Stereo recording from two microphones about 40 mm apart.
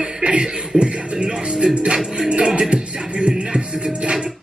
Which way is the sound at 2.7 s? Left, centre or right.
Right.